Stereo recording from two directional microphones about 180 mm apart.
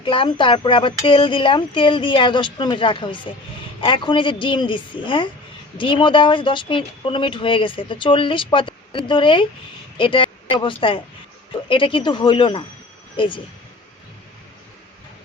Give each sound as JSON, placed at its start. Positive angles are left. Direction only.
{"t": 0.0, "sound": "a woman's voice", "side_deg": 30}